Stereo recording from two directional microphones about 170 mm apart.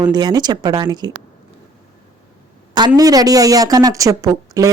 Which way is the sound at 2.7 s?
25° right (ahead or behind).